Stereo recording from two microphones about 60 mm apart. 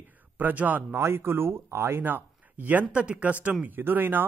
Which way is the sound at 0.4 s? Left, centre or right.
Right.